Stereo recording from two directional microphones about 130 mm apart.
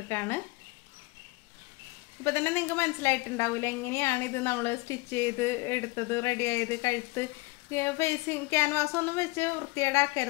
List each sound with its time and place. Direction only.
0.1 s speech: 15° left (ahead or behind)
2.2 s a woman's voice: 20° left (ahead or behind)